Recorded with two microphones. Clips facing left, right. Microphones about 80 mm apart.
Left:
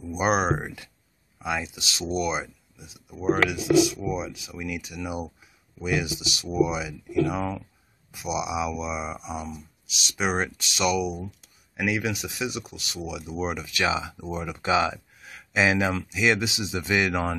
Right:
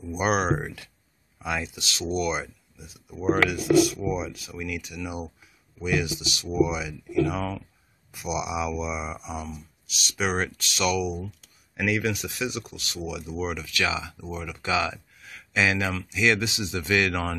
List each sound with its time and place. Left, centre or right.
0.1 s speech: centre
4.6 s speech: centre
6.0 s speech: right
6.4 s speech: centre